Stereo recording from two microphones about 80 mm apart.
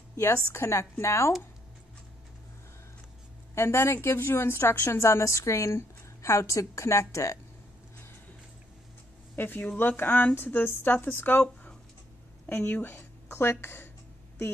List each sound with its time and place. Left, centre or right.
0.1 s a sound: left
0.5 s a woman's voice: left
3.5 s a woman's voice: left
9.3 s a woman's voice: left